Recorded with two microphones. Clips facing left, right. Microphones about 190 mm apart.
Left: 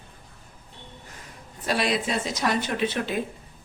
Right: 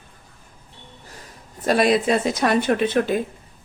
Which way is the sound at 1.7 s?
50° right (ahead or behind).